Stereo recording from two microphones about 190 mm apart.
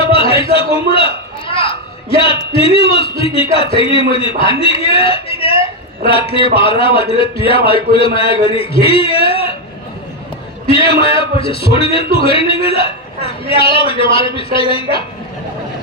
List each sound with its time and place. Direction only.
0.0 s a sound: 30° left (ahead or behind)
2.2 s a man's voice: 30° left (ahead or behind)
10.7 s a man's voice: 30° left (ahead or behind)